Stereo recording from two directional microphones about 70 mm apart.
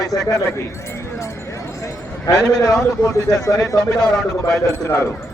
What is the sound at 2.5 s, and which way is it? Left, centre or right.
A man's voice, left.